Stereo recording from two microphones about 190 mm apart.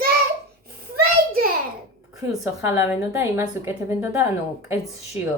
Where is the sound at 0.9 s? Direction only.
55° right (ahead or behind).